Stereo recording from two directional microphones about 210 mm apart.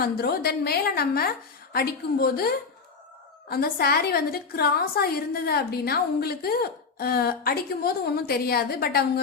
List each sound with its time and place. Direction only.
0.0 s a woman's voice: 50° left (ahead or behind)